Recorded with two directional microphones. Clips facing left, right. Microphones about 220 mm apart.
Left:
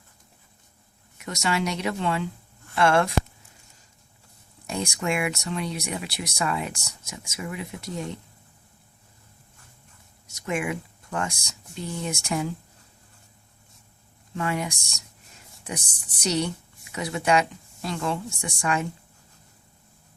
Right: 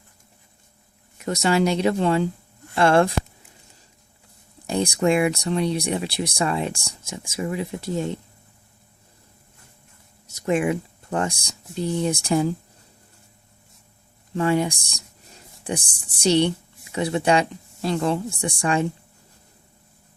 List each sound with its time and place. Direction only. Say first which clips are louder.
1.2 s speech: right 7 dB; 35° right (ahead or behind)
4.6 s speech: right 8 dB; 35° right (ahead or behind)
10.4 s speech: right 7 dB; 30° right (ahead or behind)
14.3 s speech: right 8 dB; 30° right (ahead or behind)
16.2 s speech: right 7 dB; 30° right (ahead or behind)